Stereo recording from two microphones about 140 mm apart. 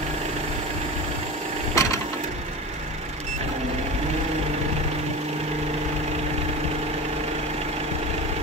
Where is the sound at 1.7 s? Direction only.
25° left (ahead or behind).